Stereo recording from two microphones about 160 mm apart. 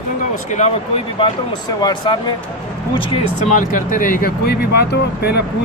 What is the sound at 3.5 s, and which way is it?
Speech, 55° left (ahead or behind).